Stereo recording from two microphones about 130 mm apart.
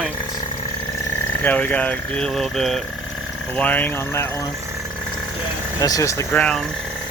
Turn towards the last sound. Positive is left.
turn(degrees=10)  # may be behind; listen again after turning